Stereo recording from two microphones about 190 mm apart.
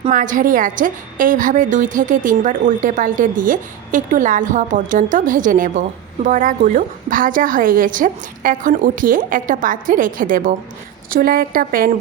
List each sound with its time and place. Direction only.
0.0 s a woman's voice: 45° right (ahead or behind)